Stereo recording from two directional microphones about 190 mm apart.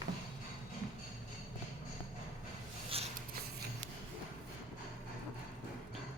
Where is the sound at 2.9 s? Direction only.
30° right (ahead or behind).